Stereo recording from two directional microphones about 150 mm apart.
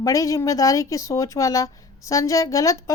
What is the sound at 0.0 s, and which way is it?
A woman's voice, 20° left (ahead or behind).